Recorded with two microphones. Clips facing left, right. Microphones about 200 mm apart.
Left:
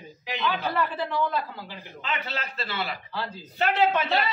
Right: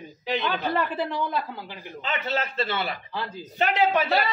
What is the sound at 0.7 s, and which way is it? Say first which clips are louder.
A man's voice: right 1 dB; 20° right (ahead or behind).